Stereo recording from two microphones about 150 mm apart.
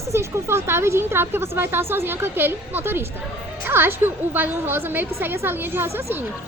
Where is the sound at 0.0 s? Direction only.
20° right (ahead or behind).